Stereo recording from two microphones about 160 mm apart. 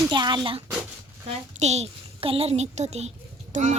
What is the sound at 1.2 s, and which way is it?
A child's voice, 45° right (ahead or behind).